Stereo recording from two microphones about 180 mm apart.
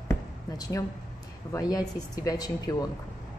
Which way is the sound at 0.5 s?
20° left (ahead or behind).